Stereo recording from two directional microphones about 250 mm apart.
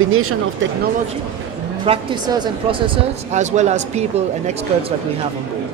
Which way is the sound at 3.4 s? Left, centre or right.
Right.